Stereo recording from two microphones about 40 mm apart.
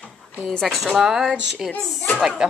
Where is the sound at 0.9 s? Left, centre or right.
Centre.